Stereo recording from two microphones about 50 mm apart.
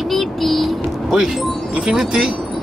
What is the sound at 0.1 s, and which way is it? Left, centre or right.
Vehicle, centre.